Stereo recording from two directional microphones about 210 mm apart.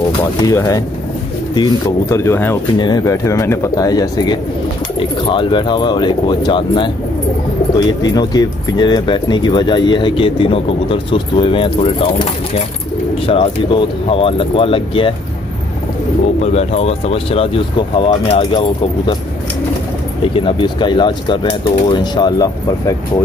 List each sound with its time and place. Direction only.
0.4 s speech: 15° left (ahead or behind)
8.0 s speech: 20° left (ahead or behind)
16.5 s speech: 30° left (ahead or behind)
20.3 s speech: 25° left (ahead or behind)